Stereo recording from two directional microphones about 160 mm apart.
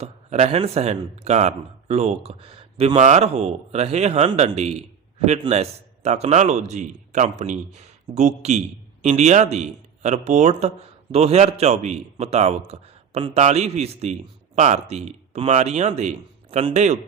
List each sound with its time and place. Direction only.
0.0 s a man's voice: 40° right (ahead or behind)